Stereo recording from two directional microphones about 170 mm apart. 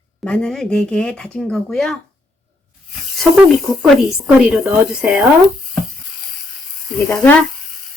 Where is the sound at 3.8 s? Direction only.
Centre (ahead or behind).